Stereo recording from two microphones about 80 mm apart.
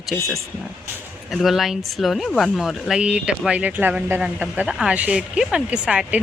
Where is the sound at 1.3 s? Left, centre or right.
Centre.